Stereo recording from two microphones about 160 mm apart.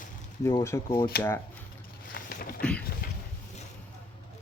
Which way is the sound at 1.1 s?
80° left.